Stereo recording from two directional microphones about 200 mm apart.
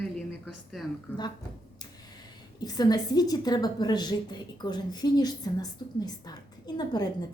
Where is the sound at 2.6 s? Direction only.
20° left (ahead or behind).